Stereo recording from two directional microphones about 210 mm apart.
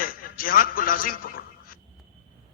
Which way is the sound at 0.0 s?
45° left (ahead or behind).